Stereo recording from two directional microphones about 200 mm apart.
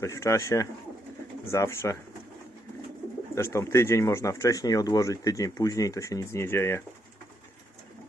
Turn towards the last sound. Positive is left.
turn(degrees=10)  # may be behind; listen again after turning